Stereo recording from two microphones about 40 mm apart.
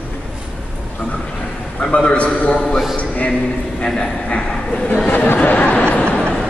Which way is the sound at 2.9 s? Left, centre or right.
Left.